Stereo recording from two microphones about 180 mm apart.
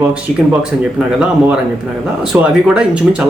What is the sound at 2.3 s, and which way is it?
Speech, 5° right (ahead or behind).